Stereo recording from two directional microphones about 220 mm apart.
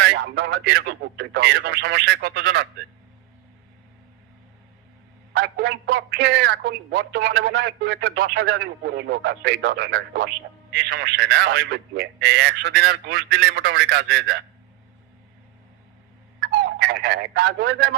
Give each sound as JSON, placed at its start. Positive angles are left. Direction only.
{"t": 0.0, "sound": "a man's voice", "side_deg": -50}
{"t": 5.3, "sound": "a man's voice", "side_deg": -50}
{"t": 16.4, "sound": "speech", "side_deg": -50}